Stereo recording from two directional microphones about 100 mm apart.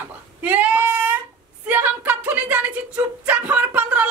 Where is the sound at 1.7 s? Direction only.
15° right (ahead or behind).